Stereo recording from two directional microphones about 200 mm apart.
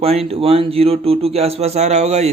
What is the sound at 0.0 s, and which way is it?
Speech, 30° right (ahead or behind).